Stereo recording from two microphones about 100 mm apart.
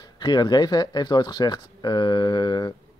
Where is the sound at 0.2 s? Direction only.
45° left (ahead or behind).